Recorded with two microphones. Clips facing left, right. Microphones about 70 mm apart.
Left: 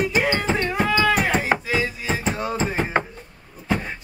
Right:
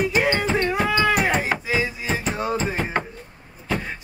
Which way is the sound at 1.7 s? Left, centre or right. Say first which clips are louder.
Even; centre.